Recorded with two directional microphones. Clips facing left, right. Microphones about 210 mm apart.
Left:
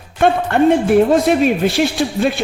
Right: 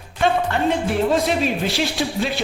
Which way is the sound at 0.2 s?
55° left (ahead or behind).